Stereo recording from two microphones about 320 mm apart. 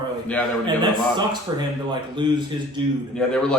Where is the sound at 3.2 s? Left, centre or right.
Centre.